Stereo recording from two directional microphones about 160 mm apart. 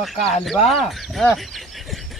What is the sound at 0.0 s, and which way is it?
Speech, centre (ahead or behind).